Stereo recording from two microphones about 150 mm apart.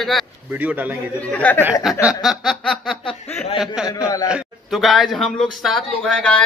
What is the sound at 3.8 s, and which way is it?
A man's voice, 5° right (ahead or behind).